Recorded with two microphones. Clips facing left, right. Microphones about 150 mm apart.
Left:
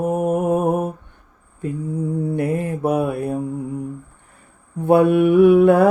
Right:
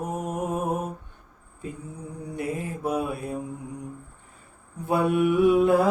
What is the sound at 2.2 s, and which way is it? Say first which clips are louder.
Mantra: left 5 dB; 55° left (ahead or behind).